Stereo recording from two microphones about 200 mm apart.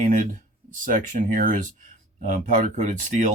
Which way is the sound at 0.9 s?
40° right (ahead or behind).